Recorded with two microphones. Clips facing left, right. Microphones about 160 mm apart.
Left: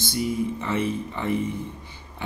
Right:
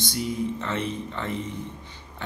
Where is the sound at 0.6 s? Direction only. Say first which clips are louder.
Left 3 dB; 10° left (ahead or behind).